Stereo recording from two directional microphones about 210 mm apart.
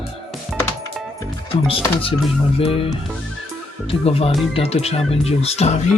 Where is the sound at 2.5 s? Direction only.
25° left (ahead or behind).